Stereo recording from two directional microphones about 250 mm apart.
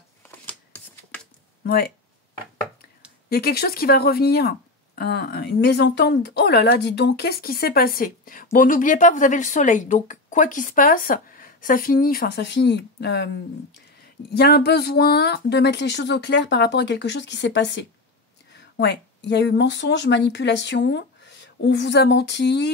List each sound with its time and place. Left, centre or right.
0.2 s shuffling cards: centre
1.6 s speech: left
3.3 s speech: left
14.3 s speech: left